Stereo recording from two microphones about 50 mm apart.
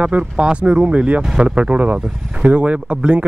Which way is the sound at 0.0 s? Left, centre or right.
Right.